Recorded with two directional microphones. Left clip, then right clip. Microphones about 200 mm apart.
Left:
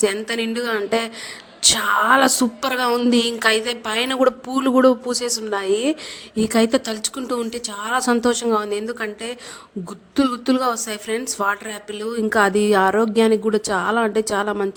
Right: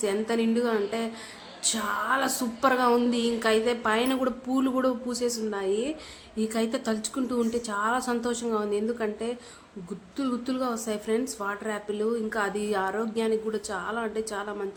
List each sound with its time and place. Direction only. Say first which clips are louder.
0.0 s a woman's voice: left 6 dB; 45° left (ahead or behind)